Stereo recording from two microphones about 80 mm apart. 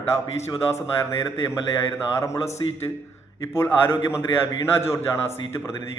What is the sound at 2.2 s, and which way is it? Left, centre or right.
A man's voice, left.